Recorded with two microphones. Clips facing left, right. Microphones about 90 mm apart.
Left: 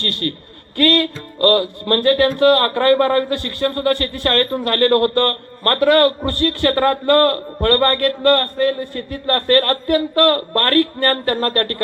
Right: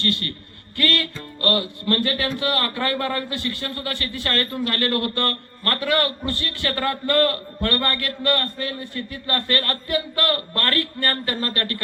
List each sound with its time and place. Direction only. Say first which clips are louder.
0.0 s speech: left 3 dB; 45° left (ahead or behind)